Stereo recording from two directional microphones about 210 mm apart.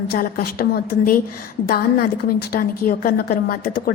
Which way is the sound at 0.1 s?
45° left (ahead or behind).